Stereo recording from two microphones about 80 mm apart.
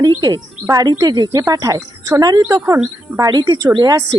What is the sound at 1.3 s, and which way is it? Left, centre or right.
Speech, right.